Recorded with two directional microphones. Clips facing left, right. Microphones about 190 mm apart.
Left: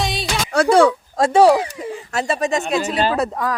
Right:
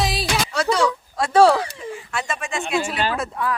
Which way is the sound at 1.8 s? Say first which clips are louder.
Left 5 dB; 40° left (ahead or behind).